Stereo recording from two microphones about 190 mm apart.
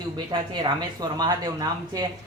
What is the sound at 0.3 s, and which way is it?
Speech, 25° right (ahead or behind).